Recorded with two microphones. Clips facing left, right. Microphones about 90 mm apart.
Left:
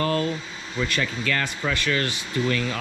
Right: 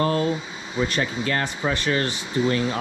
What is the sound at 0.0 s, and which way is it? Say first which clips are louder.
Air conditioning: right 2 dB; 25° right (ahead or behind).